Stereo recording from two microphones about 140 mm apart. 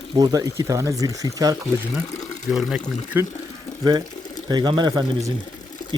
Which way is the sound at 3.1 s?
20° right (ahead or behind).